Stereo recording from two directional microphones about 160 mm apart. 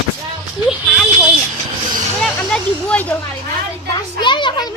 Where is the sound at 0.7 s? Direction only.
5° right (ahead or behind).